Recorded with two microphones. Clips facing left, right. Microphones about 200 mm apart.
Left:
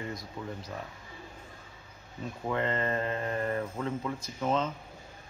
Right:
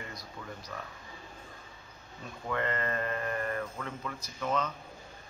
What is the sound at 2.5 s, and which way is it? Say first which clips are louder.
Speech: left 2 dB; 25° left (ahead or behind).